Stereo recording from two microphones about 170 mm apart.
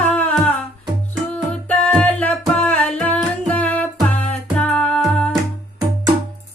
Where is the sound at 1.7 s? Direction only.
10° left (ahead or behind).